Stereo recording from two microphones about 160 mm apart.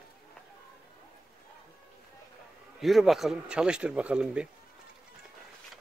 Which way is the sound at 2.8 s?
Centre (ahead or behind).